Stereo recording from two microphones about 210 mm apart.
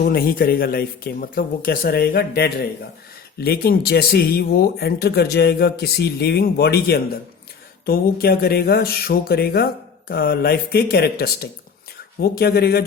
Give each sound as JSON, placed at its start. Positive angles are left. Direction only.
{"t": 0.0, "sound": "speech", "side_deg": 45}